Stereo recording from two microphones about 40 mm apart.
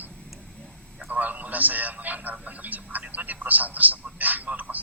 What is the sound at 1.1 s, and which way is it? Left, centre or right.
A man's voice, right.